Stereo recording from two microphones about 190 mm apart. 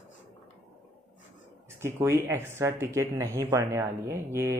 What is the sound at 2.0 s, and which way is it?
Speech, 15° right (ahead or behind).